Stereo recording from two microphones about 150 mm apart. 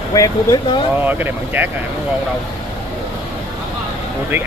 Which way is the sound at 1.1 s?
10° right (ahead or behind).